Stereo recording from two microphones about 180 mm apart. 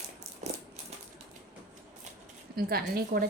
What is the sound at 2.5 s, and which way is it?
Speech, 60° right (ahead or behind).